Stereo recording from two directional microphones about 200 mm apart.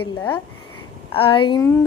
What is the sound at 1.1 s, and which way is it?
Speech, 25° left (ahead or behind).